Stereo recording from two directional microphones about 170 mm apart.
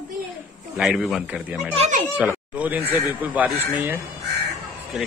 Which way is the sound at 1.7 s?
40° right (ahead or behind).